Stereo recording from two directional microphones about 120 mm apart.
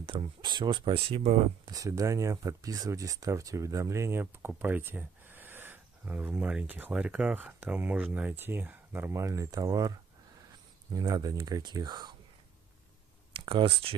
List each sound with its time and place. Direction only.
0.0 s speech: 40° right (ahead or behind)
1.7 s speech: 30° right (ahead or behind)
11.0 s speech: 30° right (ahead or behind)
13.3 s speech: 45° right (ahead or behind)